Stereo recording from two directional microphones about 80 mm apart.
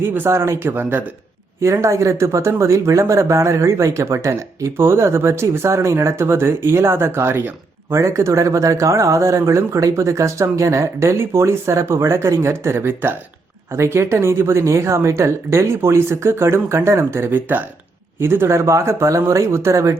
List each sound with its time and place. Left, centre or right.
0.1 s speech: right
1.6 s speech: right